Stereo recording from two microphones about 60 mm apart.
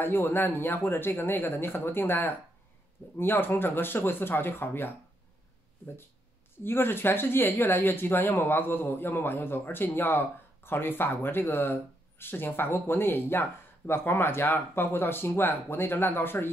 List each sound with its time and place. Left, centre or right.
0.0 s speech: left
6.6 s speech: left